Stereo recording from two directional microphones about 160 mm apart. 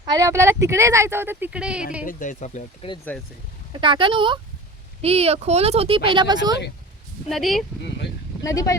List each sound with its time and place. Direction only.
0.0 s speech: 25° right (ahead or behind); by 1.8 s 5° right (ahead or behind)
2.0 s speech: 55° left (ahead or behind)
3.1 s speech: 5° left (ahead or behind)
3.7 s speech: 30° right (ahead or behind)
7.3 s speech: centre (ahead or behind)
8.4 s speech: 20° left (ahead or behind)